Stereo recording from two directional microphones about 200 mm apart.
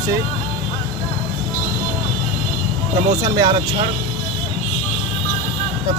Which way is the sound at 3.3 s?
20° right (ahead or behind).